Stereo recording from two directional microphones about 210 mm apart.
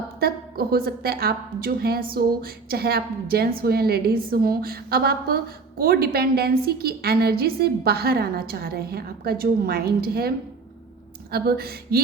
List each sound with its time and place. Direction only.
0.2 s a woman's voice: 45° right (ahead or behind)